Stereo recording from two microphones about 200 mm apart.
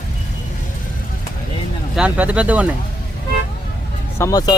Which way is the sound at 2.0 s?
5° right (ahead or behind).